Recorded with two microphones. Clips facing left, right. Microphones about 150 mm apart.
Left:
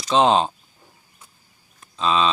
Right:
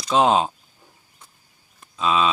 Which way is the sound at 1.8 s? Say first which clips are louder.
Even; 5° right (ahead or behind).